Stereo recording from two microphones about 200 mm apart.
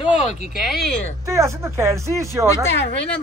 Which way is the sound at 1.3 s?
15° right (ahead or behind).